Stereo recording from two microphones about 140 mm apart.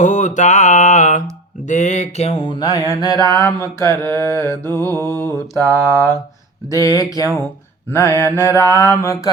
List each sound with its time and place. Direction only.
0.0 s mantra: 60° left (ahead or behind); by 5.3 s 15° left (ahead or behind)
5.5 s mantra: 25° right (ahead or behind)
6.7 s mantra: 25° left (ahead or behind)